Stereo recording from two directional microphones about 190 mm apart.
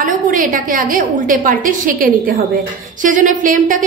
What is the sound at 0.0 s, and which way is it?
A woman's voice, 45° right (ahead or behind).